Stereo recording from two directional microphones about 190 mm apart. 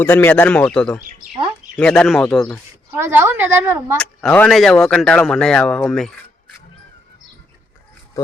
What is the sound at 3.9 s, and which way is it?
Speech, 5° left (ahead or behind).